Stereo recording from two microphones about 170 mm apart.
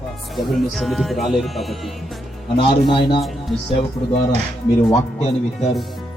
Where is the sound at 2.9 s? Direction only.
30° left (ahead or behind).